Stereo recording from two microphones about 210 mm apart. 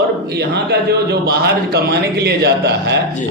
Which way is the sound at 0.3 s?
50° right (ahead or behind).